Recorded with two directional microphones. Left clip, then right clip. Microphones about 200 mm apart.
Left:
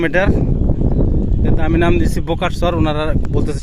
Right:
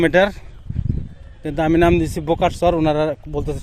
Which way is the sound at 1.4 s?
10° right (ahead or behind).